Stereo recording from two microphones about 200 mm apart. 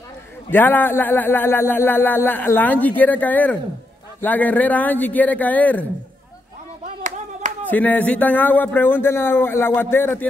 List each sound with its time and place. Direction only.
0.5 s speech: 10° left (ahead or behind)
7.0 s clapping: 40° right (ahead or behind)
7.6 s speech: 10° left (ahead or behind)